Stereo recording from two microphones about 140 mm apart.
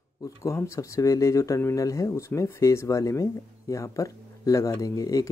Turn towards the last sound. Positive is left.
turn(degrees=25)  # may be behind; listen again after turning